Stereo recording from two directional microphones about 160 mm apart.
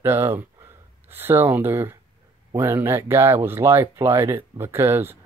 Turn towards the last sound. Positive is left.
turn(degrees=-15)  # may be behind; listen again after turning